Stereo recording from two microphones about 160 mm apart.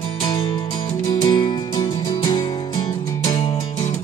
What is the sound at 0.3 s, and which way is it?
Music, 30° left (ahead or behind).